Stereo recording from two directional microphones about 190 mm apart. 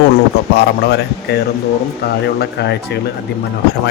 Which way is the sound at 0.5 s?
60° left (ahead or behind).